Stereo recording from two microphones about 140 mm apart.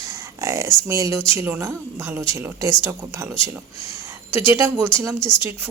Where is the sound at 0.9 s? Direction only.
20° right (ahead or behind).